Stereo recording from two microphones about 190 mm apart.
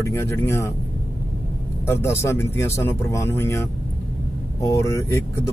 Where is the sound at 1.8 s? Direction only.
15° left (ahead or behind).